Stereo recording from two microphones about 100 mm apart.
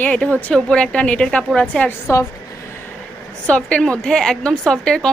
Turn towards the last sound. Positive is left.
turn(degrees=5)  # may be behind; listen again after turning